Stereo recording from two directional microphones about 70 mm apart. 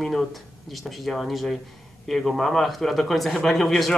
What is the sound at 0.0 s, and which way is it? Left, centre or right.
A man's voice, centre.